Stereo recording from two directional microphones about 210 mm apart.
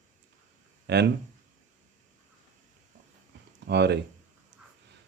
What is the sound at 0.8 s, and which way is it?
Speech, 55° right (ahead or behind).